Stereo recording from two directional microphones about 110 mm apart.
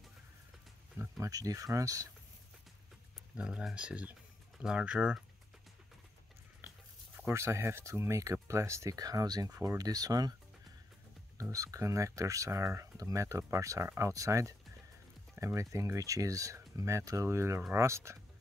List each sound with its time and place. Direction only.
1.2 s speech: 30° right (ahead or behind)
3.3 s speech: 10° right (ahead or behind)
7.2 s speech: 25° right (ahead or behind)
11.5 s speech: 30° right (ahead or behind)